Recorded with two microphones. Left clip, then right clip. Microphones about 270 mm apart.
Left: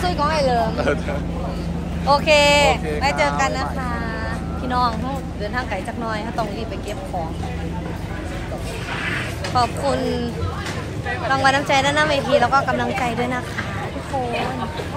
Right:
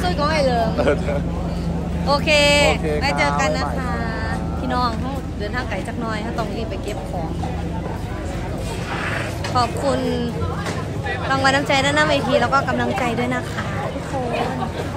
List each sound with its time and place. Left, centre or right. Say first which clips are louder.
0.0 s a sound: even; centre
2.0 s a woman's voice: left 2 dB; centre
4.6 s speech: left 2 dB; centre
9.6 s a woman's voice: even; centre